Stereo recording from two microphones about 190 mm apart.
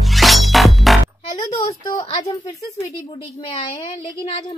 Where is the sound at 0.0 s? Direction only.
Centre (ahead or behind).